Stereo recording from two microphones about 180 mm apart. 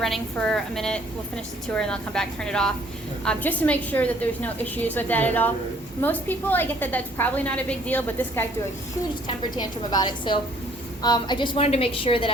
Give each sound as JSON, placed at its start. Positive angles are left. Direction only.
{"t": 0.0, "sound": "a woman's voice", "side_deg": 5}
{"t": 9.2, "sound": "a woman's voice", "side_deg": 25}